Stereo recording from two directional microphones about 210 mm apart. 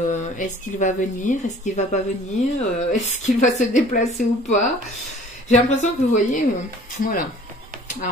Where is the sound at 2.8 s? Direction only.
35° left (ahead or behind).